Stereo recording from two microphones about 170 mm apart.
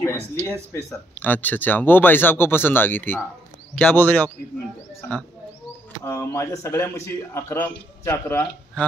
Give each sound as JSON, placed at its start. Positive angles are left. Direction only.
{"t": 0.0, "sound": "speech", "side_deg": 10}
{"t": 6.0, "sound": "speech", "side_deg": 15}